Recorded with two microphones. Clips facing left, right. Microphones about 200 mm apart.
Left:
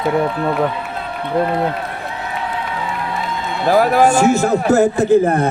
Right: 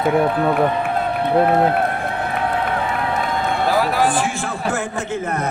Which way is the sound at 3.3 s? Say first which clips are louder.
Right 2 dB; 55° right (ahead or behind).